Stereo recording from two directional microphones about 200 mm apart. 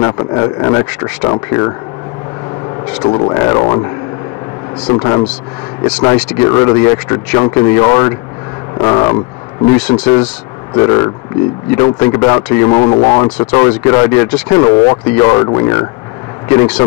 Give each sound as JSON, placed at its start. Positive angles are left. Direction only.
{"t": 0.0, "sound": "speech", "side_deg": 20}
{"t": 3.0, "sound": "a man's voice", "side_deg": 15}
{"t": 4.9, "sound": "a man's voice", "side_deg": 20}
{"t": 5.9, "sound": "a man's voice", "side_deg": 5}
{"t": 9.7, "sound": "a man's voice", "side_deg": 5}